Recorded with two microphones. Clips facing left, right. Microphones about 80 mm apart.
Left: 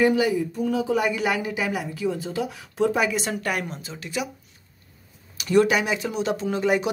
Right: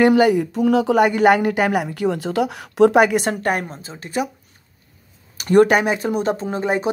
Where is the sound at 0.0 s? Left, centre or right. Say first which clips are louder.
Right 6 dB; right.